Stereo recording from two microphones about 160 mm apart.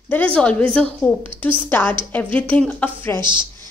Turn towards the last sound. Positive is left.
turn(degrees=-30)  # may be behind; listen again after turning